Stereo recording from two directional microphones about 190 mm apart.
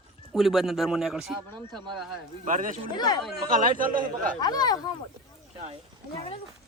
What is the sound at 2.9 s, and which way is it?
Speech, 20° left (ahead or behind).